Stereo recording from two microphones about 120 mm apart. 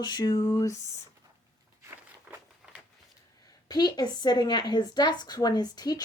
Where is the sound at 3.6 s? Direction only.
35° left (ahead or behind).